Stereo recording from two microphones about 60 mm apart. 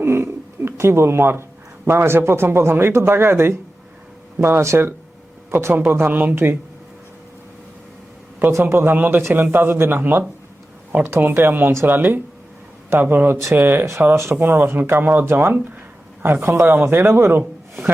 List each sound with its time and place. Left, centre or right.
0.0 s a sound: right
1.9 s a man's voice: right
6.1 s speech: right
8.6 s a man's voice: right